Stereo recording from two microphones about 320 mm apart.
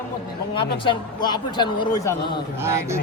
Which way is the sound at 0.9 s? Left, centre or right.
Centre.